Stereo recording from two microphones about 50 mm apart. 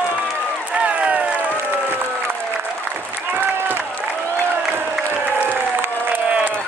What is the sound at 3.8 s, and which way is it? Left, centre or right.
Applause, left.